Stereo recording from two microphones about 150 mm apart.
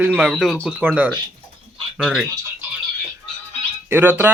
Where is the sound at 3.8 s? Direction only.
15° right (ahead or behind).